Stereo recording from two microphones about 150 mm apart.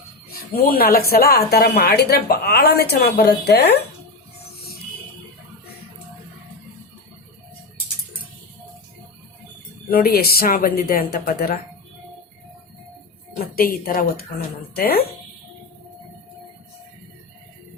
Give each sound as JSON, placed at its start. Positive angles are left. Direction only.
{"t": 0.3, "sound": "speech", "side_deg": 85}
{"t": 1.1, "sound": "a woman's voice", "side_deg": 90}
{"t": 9.9, "sound": "speech", "side_deg": 85}
{"t": 13.4, "sound": "a woman's voice", "side_deg": 75}
{"t": 14.8, "sound": "a woman's voice", "side_deg": 90}